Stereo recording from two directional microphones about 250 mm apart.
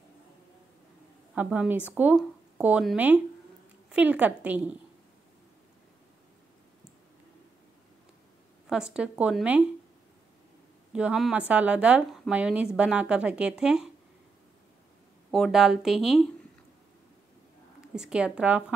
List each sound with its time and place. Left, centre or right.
1.3 s a woman's voice: centre
8.6 s a woman's voice: centre
10.9 s a woman's voice: centre
15.3 s a woman's voice: centre
17.9 s a woman's voice: centre